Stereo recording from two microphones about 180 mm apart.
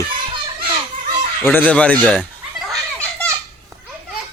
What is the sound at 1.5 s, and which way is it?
Speech, 10° left (ahead or behind).